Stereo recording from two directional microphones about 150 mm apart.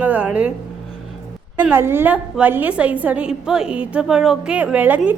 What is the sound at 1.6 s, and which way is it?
A woman's voice, 15° right (ahead or behind).